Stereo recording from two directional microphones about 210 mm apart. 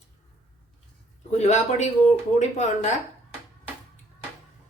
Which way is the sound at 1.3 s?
30° left (ahead or behind).